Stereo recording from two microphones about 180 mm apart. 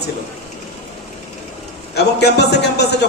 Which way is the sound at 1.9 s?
65° left (ahead or behind).